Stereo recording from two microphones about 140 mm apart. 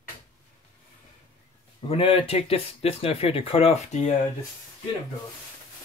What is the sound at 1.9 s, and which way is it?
Speech, 40° left (ahead or behind).